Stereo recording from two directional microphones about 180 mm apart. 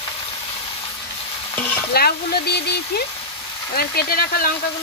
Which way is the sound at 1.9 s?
60° left (ahead or behind).